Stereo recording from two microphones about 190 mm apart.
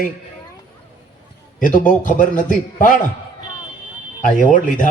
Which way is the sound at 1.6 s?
45° left (ahead or behind).